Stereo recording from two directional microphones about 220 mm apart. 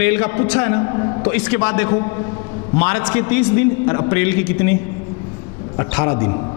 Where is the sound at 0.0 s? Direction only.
15° left (ahead or behind).